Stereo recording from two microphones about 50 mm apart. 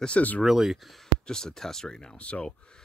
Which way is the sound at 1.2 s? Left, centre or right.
Centre.